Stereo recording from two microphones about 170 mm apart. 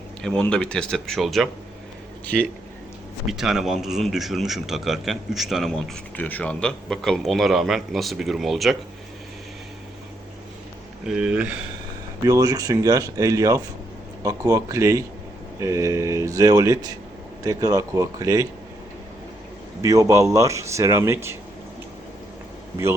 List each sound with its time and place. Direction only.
0.2 s a man's voice: 5° left (ahead or behind)
11.2 s speech: 5° right (ahead or behind)
12.3 s speech: 20° right (ahead or behind)
19.8 s speech: 20° right (ahead or behind)